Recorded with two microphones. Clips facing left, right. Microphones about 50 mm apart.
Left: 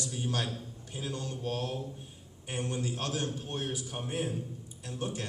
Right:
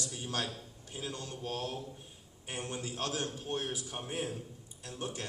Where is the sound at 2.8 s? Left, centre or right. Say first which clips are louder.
Left 2 dB; left.